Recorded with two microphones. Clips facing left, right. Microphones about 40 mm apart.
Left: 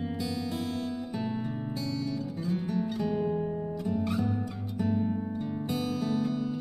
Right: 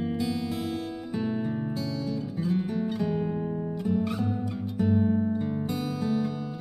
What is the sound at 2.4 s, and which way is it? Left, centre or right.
Music, centre.